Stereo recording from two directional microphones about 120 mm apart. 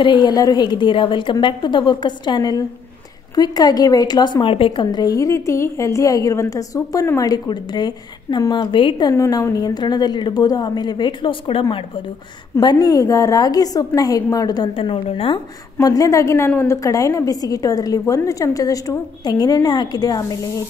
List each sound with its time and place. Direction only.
0.0 s a woman's voice: 40° left (ahead or behind)
4.8 s a woman's voice: 30° left (ahead or behind)
9.1 s a woman's voice: 25° left (ahead or behind); by 11.6 s 45° left (ahead or behind)
12.5 s a woman's voice: 35° left (ahead or behind)
14.7 s a woman's voice: 50° left (ahead or behind)
15.8 s a woman's voice: 30° left (ahead or behind)